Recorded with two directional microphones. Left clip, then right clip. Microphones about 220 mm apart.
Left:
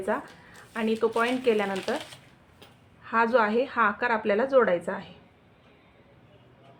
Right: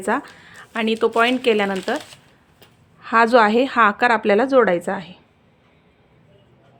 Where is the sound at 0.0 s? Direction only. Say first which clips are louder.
Right 7 dB; 50° right (ahead or behind).